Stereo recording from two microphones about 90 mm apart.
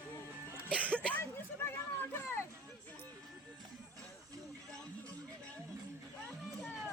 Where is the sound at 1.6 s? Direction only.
25° left (ahead or behind).